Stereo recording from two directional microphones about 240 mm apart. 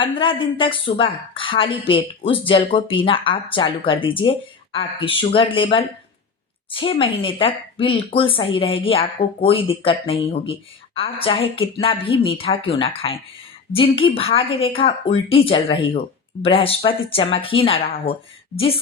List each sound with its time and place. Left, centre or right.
0.0 s speech: left